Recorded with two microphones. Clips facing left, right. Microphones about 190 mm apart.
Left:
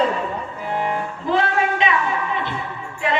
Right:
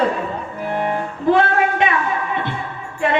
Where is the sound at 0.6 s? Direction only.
55° right (ahead or behind).